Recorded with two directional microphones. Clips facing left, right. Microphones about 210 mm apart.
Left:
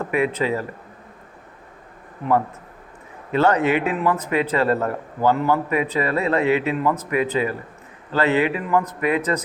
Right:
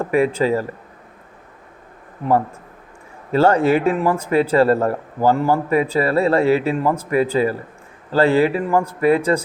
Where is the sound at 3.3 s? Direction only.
30° right (ahead or behind).